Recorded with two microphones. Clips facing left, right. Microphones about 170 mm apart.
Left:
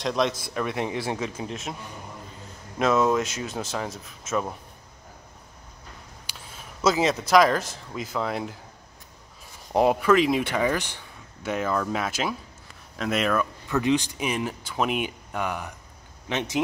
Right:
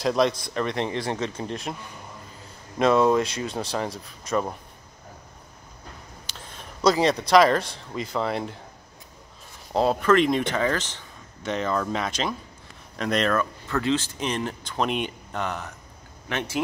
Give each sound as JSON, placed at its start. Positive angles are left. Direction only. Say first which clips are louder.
{"t": 0.0, "sound": "speech", "louder": "right 3 dB", "side_deg": 0}
{"t": 2.8, "sound": "speech", "louder": "right 2 dB", "side_deg": 0}
{"t": 6.2, "sound": "speech", "louder": "right 2 dB", "side_deg": 5}
{"t": 9.7, "sound": "speech", "louder": "left 1 dB", "side_deg": 15}